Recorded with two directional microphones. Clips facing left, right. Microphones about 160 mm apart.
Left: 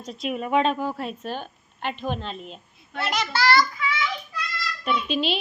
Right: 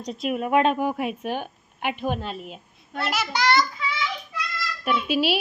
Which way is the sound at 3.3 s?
20° right (ahead or behind).